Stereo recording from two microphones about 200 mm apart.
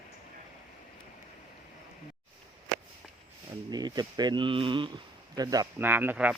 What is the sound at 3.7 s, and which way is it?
Speech, 20° right (ahead or behind).